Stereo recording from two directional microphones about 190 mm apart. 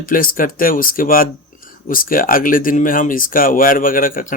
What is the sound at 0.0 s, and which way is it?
Speech, 50° left (ahead or behind).